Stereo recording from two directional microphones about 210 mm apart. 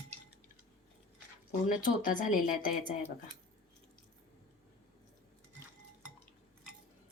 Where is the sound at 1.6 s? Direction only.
40° left (ahead or behind).